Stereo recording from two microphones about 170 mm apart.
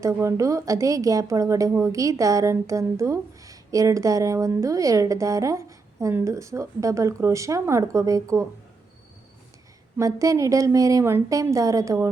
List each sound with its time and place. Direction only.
0.0 s a woman's voice: 15° right (ahead or behind)
10.0 s a woman's voice: 20° right (ahead or behind)